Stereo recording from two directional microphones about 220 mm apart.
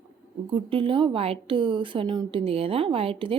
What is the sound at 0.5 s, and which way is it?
A woman's voice, 25° right (ahead or behind).